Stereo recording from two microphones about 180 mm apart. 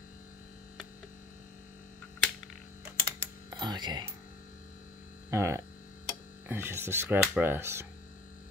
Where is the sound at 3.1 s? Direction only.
25° right (ahead or behind).